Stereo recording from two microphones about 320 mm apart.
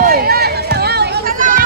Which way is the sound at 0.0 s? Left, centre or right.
Right.